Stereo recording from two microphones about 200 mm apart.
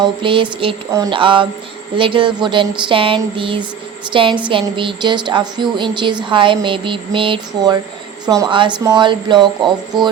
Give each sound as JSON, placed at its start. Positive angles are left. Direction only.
{"t": 0.0, "sound": "speech", "side_deg": -25}